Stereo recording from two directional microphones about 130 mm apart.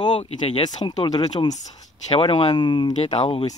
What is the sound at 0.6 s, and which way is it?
Speech, 35° left (ahead or behind).